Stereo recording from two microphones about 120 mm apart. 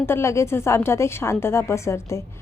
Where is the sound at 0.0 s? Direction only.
20° left (ahead or behind).